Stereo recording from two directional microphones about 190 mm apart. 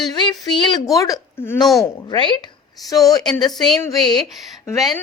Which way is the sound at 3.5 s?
Centre (ahead or behind).